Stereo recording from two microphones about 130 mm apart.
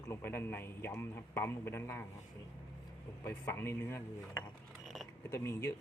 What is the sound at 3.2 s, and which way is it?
Speech, 20° left (ahead or behind).